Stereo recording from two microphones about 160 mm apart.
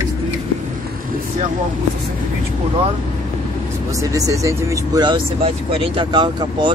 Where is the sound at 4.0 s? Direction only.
20° right (ahead or behind).